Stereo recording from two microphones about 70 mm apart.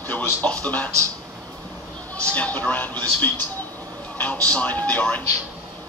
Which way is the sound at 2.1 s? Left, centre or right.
Centre.